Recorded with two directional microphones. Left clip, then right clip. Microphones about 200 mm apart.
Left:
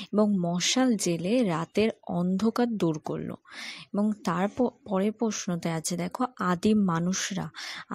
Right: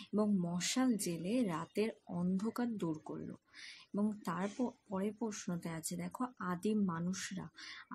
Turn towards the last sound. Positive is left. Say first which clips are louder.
# left 13 dB
turn(degrees=40)  # may be behind; listen again after turning